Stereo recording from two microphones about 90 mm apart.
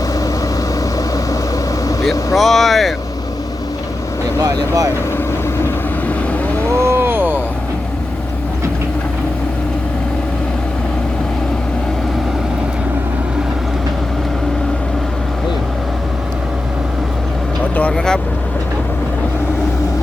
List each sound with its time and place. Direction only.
0.9 s vehicle: 40° left (ahead or behind)
2.3 s speech: centre (ahead or behind)
4.4 s speech: 40° right (ahead or behind)
6.7 s vehicle: 30° right (ahead or behind)
17.7 s speech: 10° left (ahead or behind)